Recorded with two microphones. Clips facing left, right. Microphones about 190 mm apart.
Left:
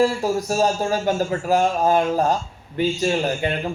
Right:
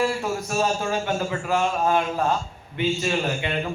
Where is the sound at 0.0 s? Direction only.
35° left (ahead or behind).